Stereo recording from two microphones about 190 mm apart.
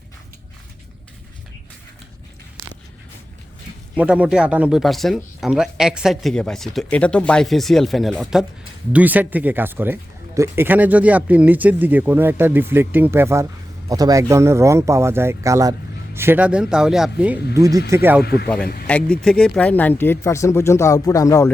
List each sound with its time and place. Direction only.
3.9 s speech: 5° right (ahead or behind)
17.5 s speech: 15° right (ahead or behind)
18.2 s a man's voice: 55° left (ahead or behind)
18.4 s speech: 5° left (ahead or behind)